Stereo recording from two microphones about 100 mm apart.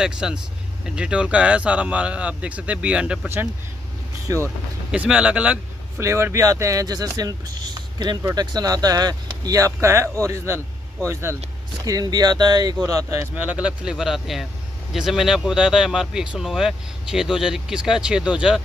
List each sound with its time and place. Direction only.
0.0 s speech: 10° right (ahead or behind)
4.3 s speech: 30° right (ahead or behind)
4.9 s speech: 10° right (ahead or behind)
5.9 s speech: 25° right (ahead or behind)
11.8 s speech: 40° right (ahead or behind)
12.8 s speech: 35° right (ahead or behind)
13.4 s speech: 10° right (ahead or behind)